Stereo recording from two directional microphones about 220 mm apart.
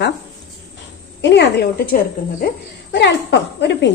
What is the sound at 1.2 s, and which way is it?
Speech, 50° left (ahead or behind).